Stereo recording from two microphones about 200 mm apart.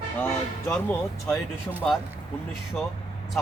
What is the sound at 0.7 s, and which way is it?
Speech, 10° left (ahead or behind).